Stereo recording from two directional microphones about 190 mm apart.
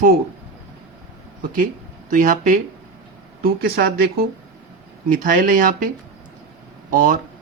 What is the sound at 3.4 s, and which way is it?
Speech, 55° right (ahead or behind).